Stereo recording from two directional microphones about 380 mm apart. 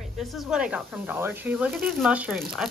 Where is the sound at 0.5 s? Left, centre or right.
Centre.